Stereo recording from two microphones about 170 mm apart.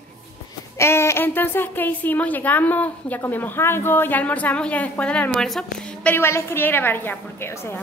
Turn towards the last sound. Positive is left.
turn(degrees=15)  # may be behind; listen again after turning